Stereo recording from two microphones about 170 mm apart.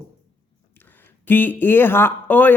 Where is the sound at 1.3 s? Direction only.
10° left (ahead or behind).